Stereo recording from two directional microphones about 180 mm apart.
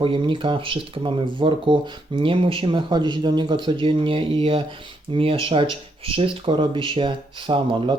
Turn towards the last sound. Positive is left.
turn(degrees=-30)  # may be behind; listen again after turning